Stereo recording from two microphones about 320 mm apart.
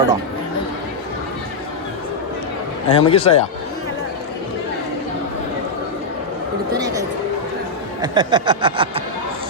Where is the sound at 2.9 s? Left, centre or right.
Centre.